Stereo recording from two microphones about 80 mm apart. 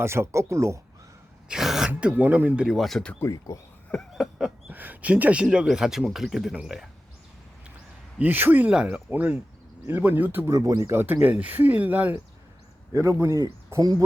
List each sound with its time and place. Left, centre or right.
0.0 s speech: right
1.5 s speech: centre
1.9 s speech: centre
2.6 s speech: centre
3.5 s speech: left
4.1 s a sound: centre
4.7 s speech: right
8.2 s speech: right
8.7 s speech: centre
10.4 s speech: right
11.0 s speech: right
12.9 s speech: right
13.7 s speech: right